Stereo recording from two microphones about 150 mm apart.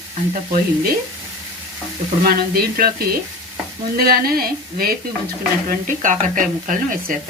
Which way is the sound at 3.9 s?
80° right.